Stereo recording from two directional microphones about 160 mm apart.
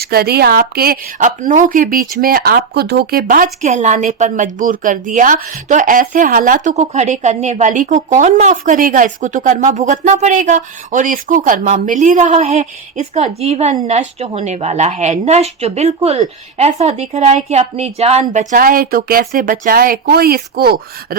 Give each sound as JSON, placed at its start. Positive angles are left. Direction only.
{"t": 0.0, "sound": "a woman's voice", "side_deg": -75}
{"t": 18.5, "sound": "speech", "side_deg": -60}